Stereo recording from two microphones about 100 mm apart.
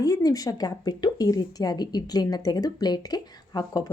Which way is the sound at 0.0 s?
40° left (ahead or behind).